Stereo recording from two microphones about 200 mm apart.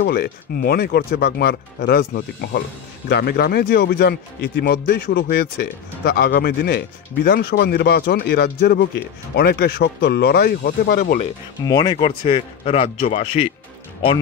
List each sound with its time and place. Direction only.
0.0 s speech: 50° left (ahead or behind)
11.6 s speech: 25° left (ahead or behind)